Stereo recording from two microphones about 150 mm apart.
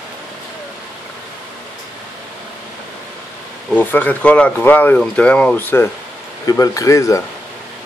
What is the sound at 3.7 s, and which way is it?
Speech, 10° left (ahead or behind).